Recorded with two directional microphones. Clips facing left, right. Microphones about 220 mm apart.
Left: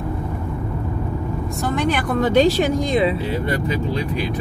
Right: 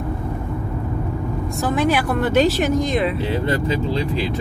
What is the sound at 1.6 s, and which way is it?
Speech, 5° right (ahead or behind).